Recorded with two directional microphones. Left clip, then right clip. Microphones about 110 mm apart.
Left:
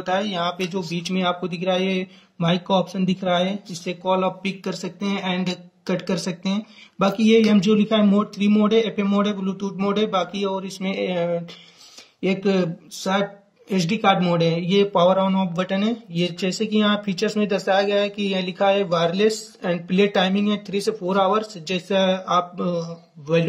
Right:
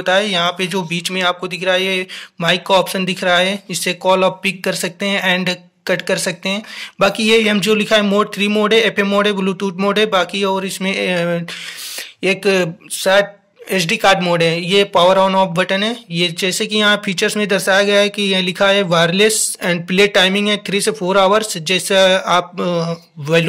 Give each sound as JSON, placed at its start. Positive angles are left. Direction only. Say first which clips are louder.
{"t": 0.0, "sound": "speech", "louder": "right 8 dB", "side_deg": -15}